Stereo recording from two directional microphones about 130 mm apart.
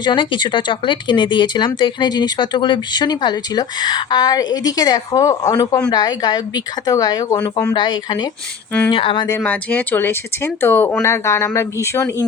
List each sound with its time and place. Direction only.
0.0 s speech: 40° left (ahead or behind)
9.4 s speech: 10° left (ahead or behind)